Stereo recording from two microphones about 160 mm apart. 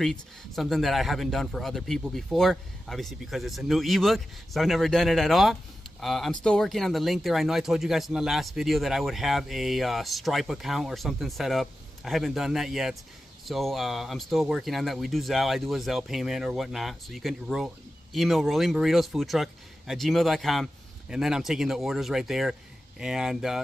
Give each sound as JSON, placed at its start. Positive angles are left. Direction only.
{"t": 0.0, "sound": "speech", "side_deg": 0}